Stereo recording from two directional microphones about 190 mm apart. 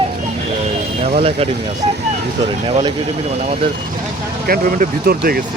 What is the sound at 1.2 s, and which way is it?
Speech, 30° right (ahead or behind).